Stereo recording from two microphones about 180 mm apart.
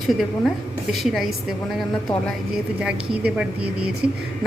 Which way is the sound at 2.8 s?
5° right (ahead or behind).